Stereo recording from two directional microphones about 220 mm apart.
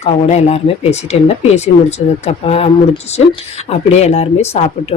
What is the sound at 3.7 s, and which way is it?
Speech, 30° left (ahead or behind).